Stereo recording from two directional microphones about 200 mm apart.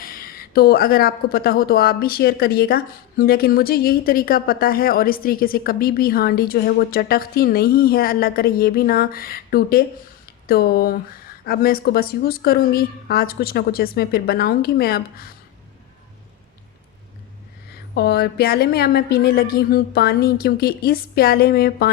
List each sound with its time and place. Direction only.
0.0 s speech: 45° left (ahead or behind)
17.9 s speech: 50° left (ahead or behind)